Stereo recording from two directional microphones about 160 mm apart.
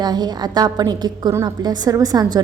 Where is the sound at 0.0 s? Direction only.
25° right (ahead or behind).